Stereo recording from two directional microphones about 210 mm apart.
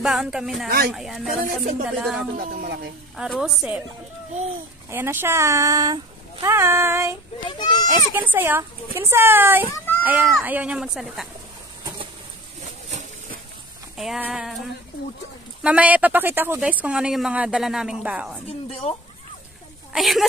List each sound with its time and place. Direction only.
0.0 s speech: centre (ahead or behind)
0.7 s speech: 45° right (ahead or behind)
0.9 s speech: centre (ahead or behind)
2.3 s speech: 40° right (ahead or behind)
3.2 s speech: centre (ahead or behind)
4.8 s speech: 10° right (ahead or behind)
7.4 s goat: 20° left (ahead or behind)
8.1 s speech: 10° right (ahead or behind)
13.9 s speech: centre (ahead or behind)
18.7 s speech: 30° left (ahead or behind)
19.9 s speech: centre (ahead or behind)